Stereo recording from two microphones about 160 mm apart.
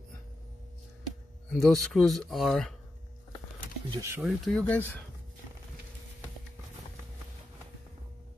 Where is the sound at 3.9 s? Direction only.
20° right (ahead or behind).